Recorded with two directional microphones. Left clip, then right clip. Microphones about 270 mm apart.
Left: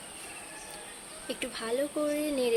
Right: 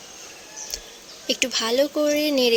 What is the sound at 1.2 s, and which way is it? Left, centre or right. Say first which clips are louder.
Speech: right 13 dB; right.